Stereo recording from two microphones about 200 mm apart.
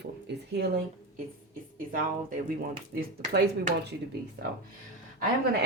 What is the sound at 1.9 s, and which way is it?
Speech, 45° right (ahead or behind).